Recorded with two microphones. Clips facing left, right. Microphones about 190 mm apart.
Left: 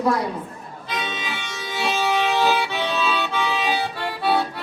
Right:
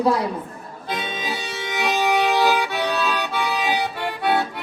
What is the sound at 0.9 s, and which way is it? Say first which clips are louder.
Music: right 2 dB; 50° right (ahead or behind).